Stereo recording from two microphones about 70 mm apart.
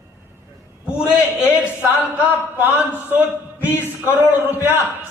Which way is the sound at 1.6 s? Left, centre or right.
Right.